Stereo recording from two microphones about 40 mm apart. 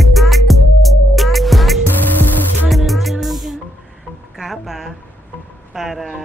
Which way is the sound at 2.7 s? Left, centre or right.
Centre.